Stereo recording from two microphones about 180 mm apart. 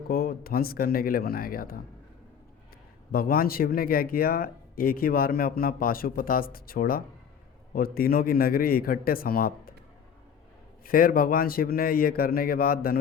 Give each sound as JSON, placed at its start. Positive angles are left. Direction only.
{"t": 0.1, "sound": "speech", "side_deg": 55}
{"t": 3.1, "sound": "a man's voice", "side_deg": 55}
{"t": 10.8, "sound": "speech", "side_deg": 50}